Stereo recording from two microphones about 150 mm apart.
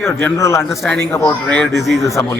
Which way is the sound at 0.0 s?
15° left (ahead or behind).